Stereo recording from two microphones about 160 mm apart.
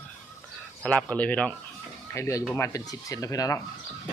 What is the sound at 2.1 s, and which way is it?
Speech, 20° left (ahead or behind).